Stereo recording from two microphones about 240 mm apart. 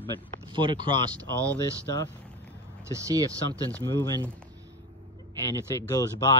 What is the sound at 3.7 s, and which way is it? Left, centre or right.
Speech, centre.